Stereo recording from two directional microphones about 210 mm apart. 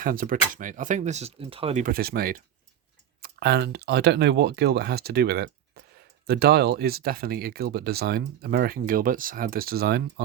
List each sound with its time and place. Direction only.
0.0 s speech: 40° right (ahead or behind)
1.8 s speech: 45° right (ahead or behind)